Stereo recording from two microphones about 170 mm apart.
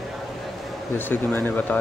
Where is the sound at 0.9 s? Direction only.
10° left (ahead or behind).